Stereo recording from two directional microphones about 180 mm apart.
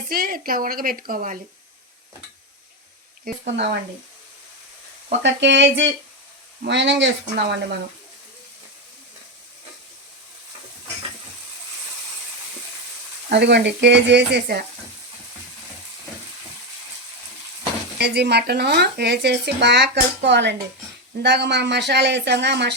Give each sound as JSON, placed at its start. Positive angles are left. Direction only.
{"t": 0.1, "sound": "a woman's voice", "side_deg": -55}
{"t": 5.2, "sound": "a sound", "side_deg": -80}
{"t": 6.7, "sound": "speech", "side_deg": -80}
{"t": 13.3, "sound": "speech", "side_deg": -75}
{"t": 17.9, "sound": "speech", "side_deg": -65}